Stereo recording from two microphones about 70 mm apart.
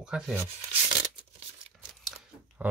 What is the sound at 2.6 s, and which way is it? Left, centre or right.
Speech, right.